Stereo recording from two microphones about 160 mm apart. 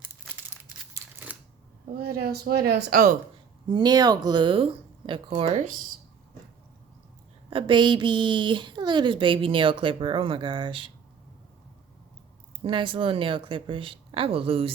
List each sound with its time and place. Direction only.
0.9 s scissors: 10° right (ahead or behind)
2.0 s speech: 75° right (ahead or behind)
3.7 s a woman's voice: 25° right (ahead or behind); by 5.6 s 40° right (ahead or behind)
7.5 s a woman's voice: 30° right (ahead or behind)
12.6 s a woman's voice: 30° right (ahead or behind)